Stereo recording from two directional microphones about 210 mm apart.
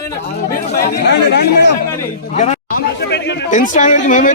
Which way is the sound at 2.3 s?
35° left (ahead or behind).